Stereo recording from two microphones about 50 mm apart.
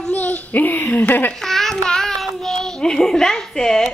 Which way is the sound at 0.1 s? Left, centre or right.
Left.